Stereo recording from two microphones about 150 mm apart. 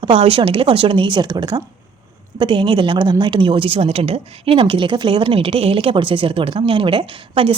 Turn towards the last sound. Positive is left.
turn(degrees=-35)  # may be behind; listen again after turning